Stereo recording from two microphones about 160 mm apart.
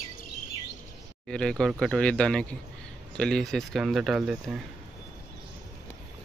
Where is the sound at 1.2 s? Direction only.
5° left (ahead or behind).